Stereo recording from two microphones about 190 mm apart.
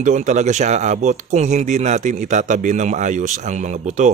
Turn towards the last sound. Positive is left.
turn(degrees=-40)  # may be behind; listen again after turning